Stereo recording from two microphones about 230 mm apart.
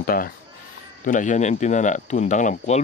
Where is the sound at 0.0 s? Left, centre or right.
Left.